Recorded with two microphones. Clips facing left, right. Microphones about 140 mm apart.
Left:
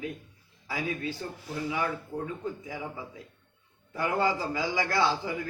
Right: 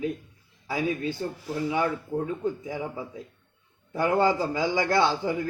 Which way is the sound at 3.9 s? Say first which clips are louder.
Right 5 dB; 25° right (ahead or behind).